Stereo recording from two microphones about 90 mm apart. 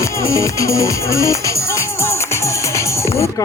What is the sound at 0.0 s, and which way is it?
Music, 35° left (ahead or behind).